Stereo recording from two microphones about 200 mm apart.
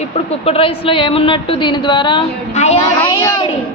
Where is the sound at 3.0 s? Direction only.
20° left (ahead or behind).